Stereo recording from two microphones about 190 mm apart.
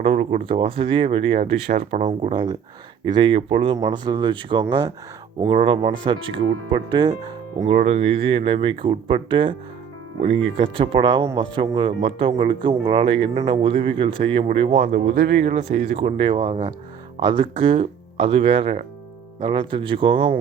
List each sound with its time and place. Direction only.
0.0 s speech: 35° right (ahead or behind)
2.3 s speech: 25° right (ahead or behind)
7.7 s speech: 35° right (ahead or behind)